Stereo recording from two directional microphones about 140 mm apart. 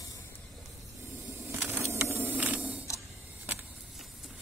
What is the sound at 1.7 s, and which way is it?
Mechanisms, 15° right (ahead or behind).